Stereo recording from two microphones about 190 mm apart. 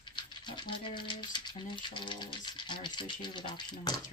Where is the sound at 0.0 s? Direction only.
25° left (ahead or behind).